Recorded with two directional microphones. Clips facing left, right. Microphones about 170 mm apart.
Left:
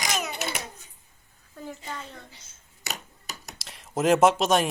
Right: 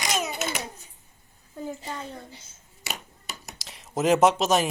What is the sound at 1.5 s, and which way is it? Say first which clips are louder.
Speech: right 3 dB; 25° right (ahead or behind).